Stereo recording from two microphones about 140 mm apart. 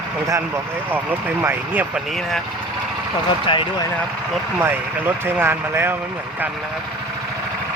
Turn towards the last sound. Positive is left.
turn(degrees=-15)  # may be behind; listen again after turning